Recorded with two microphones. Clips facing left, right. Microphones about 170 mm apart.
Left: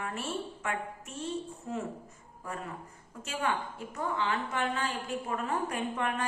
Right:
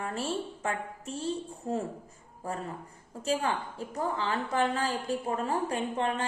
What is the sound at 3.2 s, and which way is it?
A woman's voice, 35° right (ahead or behind).